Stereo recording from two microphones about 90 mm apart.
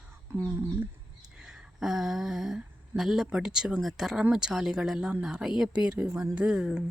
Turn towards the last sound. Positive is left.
turn(degrees=-10)  # may be behind; listen again after turning